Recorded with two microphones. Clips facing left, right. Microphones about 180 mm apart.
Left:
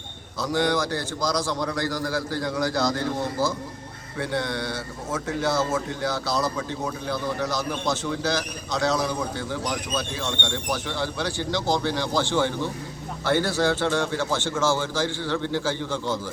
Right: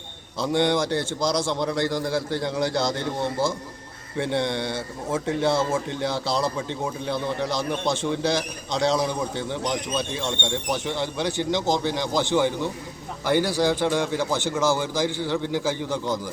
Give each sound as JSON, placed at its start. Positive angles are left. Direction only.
{"t": 0.3, "sound": "a man's voice", "side_deg": -25}